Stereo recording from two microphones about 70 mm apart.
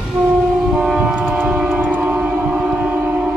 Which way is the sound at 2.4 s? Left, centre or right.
Right.